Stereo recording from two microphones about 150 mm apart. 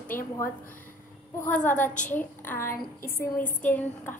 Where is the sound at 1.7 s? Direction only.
10° left (ahead or behind).